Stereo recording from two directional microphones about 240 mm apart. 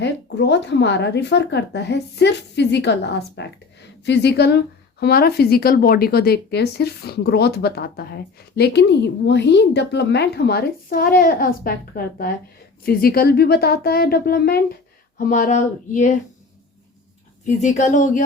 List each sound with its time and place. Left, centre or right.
0.0 s a woman's voice: left
17.4 s a woman's voice: left